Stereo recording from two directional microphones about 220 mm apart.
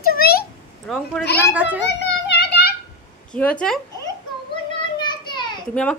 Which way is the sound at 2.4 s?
45° left (ahead or behind).